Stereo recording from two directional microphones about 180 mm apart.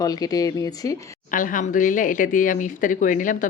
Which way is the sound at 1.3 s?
50° left (ahead or behind).